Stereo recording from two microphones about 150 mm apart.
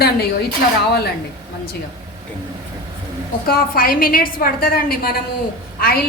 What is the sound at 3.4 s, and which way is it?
A woman's voice, 85° left.